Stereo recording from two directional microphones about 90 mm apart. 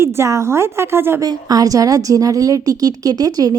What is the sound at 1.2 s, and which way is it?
A woman's voice, 45° right (ahead or behind).